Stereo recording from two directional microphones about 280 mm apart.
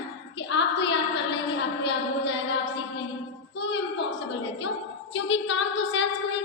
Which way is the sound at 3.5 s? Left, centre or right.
Left.